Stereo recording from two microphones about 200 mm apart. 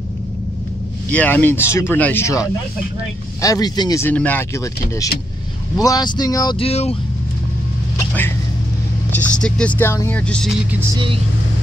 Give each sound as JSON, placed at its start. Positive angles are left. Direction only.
{"t": 1.1, "sound": "speech", "side_deg": 10}
{"t": 6.7, "sound": "speech", "side_deg": 30}
{"t": 9.4, "sound": "speech", "side_deg": 5}